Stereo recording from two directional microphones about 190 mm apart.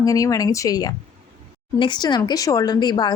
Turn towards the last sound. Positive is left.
turn(degrees=20)  # may be behind; listen again after turning